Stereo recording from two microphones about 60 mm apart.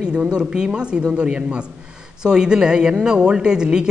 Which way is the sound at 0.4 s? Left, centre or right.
Centre.